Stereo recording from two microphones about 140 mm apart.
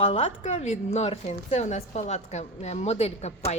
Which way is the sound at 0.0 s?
45° left (ahead or behind).